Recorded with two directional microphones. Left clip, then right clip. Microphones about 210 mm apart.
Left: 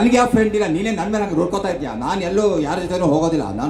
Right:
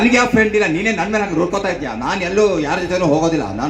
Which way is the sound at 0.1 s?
40° left (ahead or behind).